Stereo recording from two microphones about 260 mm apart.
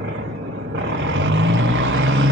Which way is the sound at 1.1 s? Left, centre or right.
Right.